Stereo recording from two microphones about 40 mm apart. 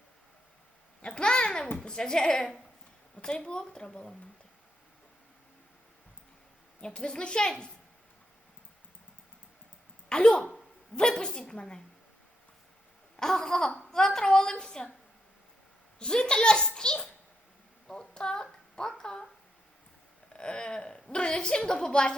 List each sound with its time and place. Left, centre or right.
1.0 s babbling: left
1.8 s a child's voice: centre
6.8 s a woman's voice: left
10.1 s a woman's voice: left
13.1 s a child's voice: centre
16.0 s a woman's voice: centre
17.8 s a sound: centre
20.3 s a woman's voice: left